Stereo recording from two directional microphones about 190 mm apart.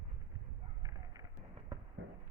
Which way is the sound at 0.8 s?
20° right (ahead or behind).